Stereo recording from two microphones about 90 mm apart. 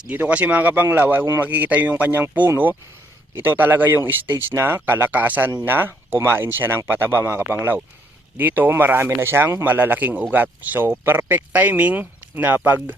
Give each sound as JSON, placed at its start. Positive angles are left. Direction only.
{"t": 0.1, "sound": "speech", "side_deg": -20}